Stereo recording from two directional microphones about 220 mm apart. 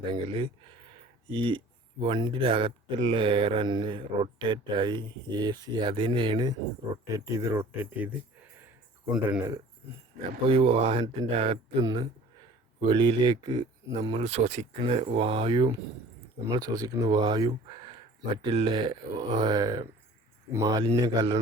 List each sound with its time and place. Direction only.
0.1 s speech: 25° right (ahead or behind)
9.1 s speech: 5° right (ahead or behind)
10.5 s speech: 25° right (ahead or behind)